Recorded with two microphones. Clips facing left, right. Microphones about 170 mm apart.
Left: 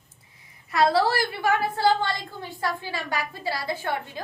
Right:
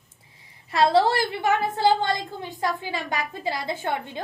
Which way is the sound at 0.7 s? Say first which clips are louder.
Right 2 dB; 25° right (ahead or behind).